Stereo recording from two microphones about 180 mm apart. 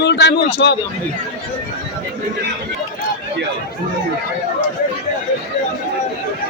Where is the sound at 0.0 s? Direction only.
70° left (ahead or behind).